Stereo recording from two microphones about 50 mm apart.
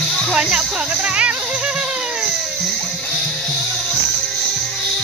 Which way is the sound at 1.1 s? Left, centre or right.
Right.